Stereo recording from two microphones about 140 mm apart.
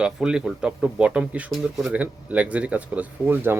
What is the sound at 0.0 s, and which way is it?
Speech, 5° right (ahead or behind).